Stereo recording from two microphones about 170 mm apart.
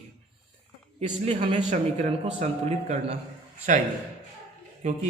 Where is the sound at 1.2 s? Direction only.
40° right (ahead or behind).